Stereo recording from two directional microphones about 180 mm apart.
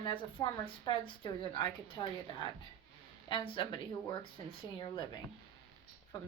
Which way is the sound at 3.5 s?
25° left (ahead or behind).